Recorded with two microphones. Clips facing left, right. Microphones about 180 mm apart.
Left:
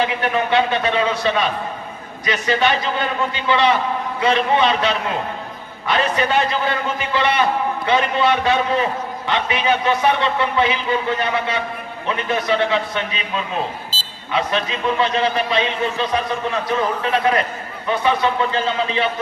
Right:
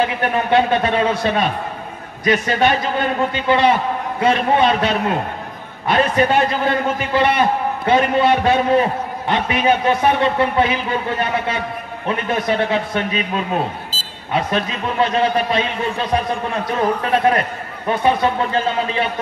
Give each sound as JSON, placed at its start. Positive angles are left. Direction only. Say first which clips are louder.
{"t": 0.0, "sound": "a man's voice", "louder": "right 1 dB", "side_deg": -50}